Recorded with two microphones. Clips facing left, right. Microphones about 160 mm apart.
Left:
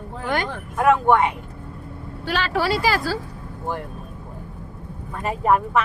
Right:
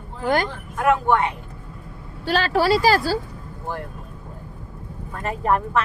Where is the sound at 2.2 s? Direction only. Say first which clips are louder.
Right 3 dB; 35° right (ahead or behind).